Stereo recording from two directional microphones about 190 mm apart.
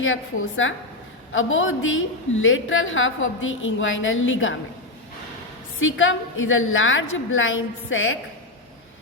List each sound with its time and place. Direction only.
0.0 s a woman's voice: 90° left
5.8 s a woman's voice: 90° left